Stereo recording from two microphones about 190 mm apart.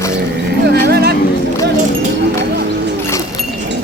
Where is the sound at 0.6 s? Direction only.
55° right (ahead or behind).